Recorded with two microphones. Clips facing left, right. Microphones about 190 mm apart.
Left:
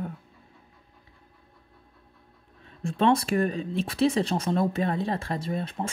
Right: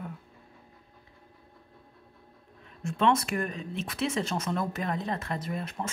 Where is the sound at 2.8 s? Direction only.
30° left (ahead or behind).